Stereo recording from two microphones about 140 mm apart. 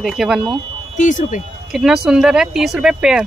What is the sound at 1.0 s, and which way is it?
Speech, 65° left (ahead or behind).